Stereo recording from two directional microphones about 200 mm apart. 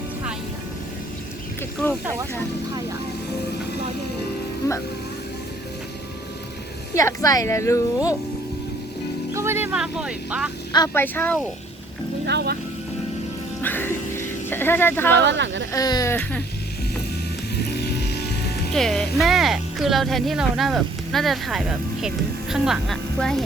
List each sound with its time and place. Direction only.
6.9 s speech: 15° left (ahead or behind)
9.3 s speech: 15° right (ahead or behind)
10.7 s speech: 20° left (ahead or behind)
12.2 s speech: 55° right (ahead or behind)
13.6 s music: 10° left (ahead or behind)
15.1 s speech: 60° right (ahead or behind)
15.7 s speech: 20° left (ahead or behind)
17.6 s music: 55° left (ahead or behind)
18.7 s speech: centre (ahead or behind)